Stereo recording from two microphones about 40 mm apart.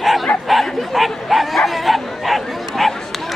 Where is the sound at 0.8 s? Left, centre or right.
Centre.